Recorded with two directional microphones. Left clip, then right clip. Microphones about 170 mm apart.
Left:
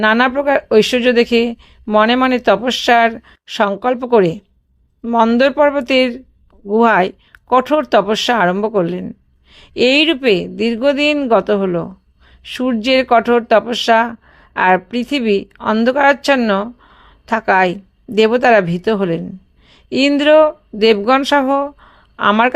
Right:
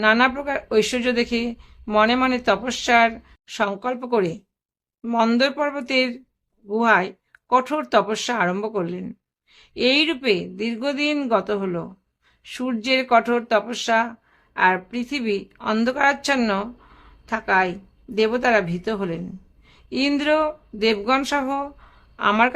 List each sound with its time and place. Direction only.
0.0 s speech: 35° left (ahead or behind)
5.4 s a woman's voice: 35° left (ahead or behind)